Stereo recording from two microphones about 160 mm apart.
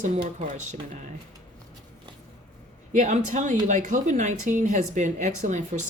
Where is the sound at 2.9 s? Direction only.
50° right (ahead or behind).